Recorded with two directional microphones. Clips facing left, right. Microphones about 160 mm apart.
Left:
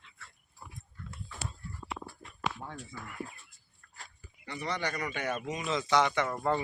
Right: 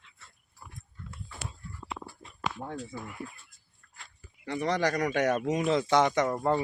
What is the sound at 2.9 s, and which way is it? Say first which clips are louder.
Speech: right 5 dB; 15° right (ahead or behind).